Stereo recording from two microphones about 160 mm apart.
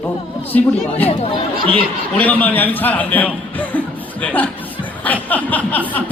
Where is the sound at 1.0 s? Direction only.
35° left (ahead or behind).